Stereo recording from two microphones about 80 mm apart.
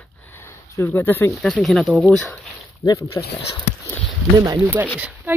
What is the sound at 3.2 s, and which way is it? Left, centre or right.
Speech, left.